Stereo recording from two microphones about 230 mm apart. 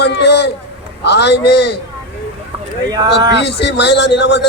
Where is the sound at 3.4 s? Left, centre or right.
Left.